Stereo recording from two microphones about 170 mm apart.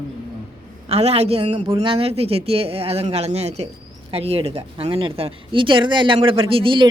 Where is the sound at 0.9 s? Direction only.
40° right (ahead or behind).